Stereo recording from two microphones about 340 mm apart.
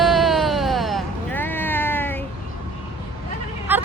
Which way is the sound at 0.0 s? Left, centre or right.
Centre.